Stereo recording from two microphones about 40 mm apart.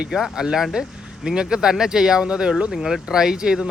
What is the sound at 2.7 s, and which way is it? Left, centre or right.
Speech, centre.